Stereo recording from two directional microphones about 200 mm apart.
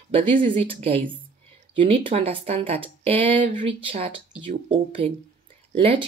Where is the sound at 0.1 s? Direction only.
25° right (ahead or behind).